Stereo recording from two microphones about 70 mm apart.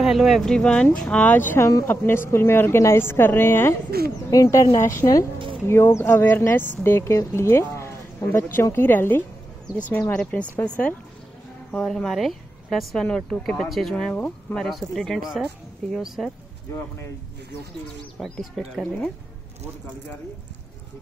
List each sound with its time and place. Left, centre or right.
0.0 s speech: centre
0.5 s speech: centre
1.6 s a woman's voice: left
1.9 s speech: left
4.3 s speech: left
5.7 s speech: left
11.8 s speech: centre
12.9 s speech: centre
14.1 s speech: centre
14.6 s speech: centre